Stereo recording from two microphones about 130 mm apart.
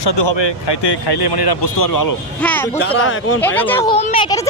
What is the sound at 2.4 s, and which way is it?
Speech, 10° left (ahead or behind).